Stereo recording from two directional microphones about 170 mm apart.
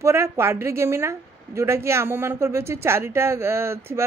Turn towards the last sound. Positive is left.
turn(degrees=-15)  # may be behind; listen again after turning